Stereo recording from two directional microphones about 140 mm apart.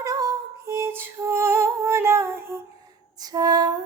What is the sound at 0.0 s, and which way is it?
Lullaby, 25° right (ahead or behind).